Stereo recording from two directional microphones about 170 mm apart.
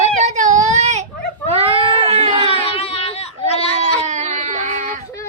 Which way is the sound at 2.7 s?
35° left (ahead or behind).